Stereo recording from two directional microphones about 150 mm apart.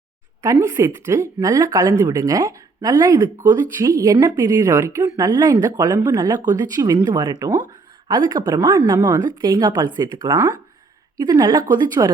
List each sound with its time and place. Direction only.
0.4 s speech: 20° right (ahead or behind)